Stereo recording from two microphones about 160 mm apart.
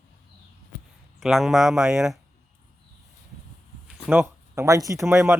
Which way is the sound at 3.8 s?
15° right (ahead or behind).